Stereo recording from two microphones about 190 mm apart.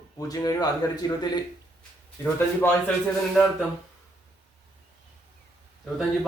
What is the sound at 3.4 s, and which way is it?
Speech, centre (ahead or behind).